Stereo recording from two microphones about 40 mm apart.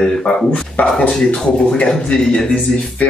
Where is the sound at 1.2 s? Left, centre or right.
Left.